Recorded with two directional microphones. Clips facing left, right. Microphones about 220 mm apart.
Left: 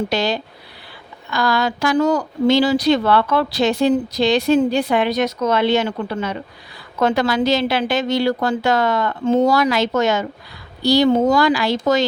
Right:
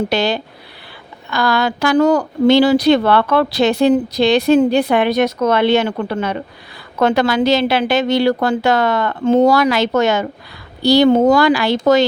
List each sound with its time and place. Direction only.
0.1 s speech: 65° right (ahead or behind)